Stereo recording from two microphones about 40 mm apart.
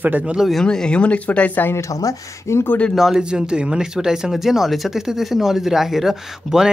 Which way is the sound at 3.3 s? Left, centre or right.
Right.